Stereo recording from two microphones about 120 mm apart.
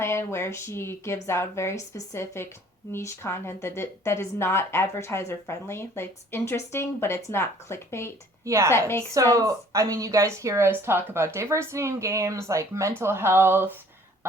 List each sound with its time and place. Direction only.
0.0 s speech: 20° left (ahead or behind)
8.4 s speech: 25° right (ahead or behind)
8.7 s speech: 20° left (ahead or behind)
9.3 s speech: 25° right (ahead or behind)